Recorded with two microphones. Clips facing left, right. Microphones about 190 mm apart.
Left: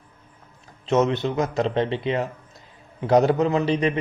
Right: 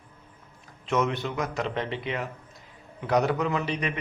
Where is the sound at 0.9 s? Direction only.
25° left (ahead or behind).